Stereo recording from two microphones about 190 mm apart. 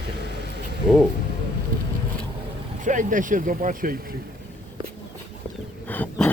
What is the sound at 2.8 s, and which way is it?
Speech, 45° right (ahead or behind).